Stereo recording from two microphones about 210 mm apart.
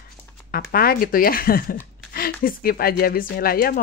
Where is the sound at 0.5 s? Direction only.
45° left (ahead or behind).